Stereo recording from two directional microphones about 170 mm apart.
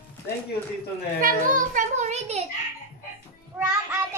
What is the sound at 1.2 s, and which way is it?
A child's voice, 50° right (ahead or behind).